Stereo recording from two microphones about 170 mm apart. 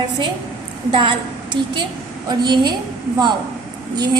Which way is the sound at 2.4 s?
25° right (ahead or behind).